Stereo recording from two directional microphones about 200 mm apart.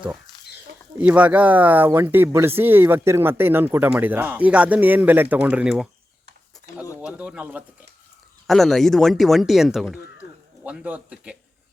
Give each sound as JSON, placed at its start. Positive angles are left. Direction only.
{"t": 0.3, "sound": "a sound", "side_deg": 20}
{"t": 0.9, "sound": "speech", "side_deg": -5}
{"t": 7.0, "sound": "pigeon", "side_deg": -5}
{"t": 8.4, "sound": "speech", "side_deg": 0}